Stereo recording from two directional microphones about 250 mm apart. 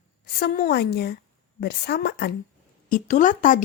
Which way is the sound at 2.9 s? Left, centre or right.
Left.